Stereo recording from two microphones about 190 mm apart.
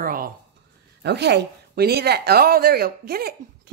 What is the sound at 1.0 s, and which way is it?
A woman's voice, 60° right (ahead or behind).